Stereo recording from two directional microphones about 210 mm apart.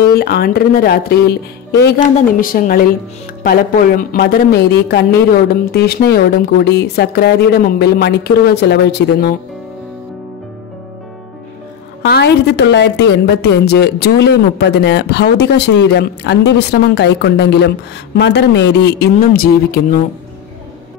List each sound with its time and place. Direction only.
0.1 s a woman's voice: 45° left (ahead or behind)
2.4 s a woman's voice: 40° left (ahead or behind)
12.0 s a woman's voice: 55° left (ahead or behind)